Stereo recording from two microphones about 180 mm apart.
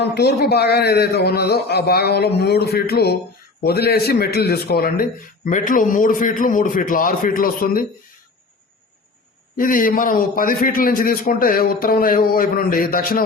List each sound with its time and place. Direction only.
0.0 s a man's voice: 65° left (ahead or behind)
9.6 s a man's voice: 50° left (ahead or behind)